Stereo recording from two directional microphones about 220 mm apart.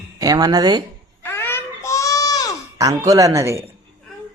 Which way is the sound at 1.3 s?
10° left (ahead or behind).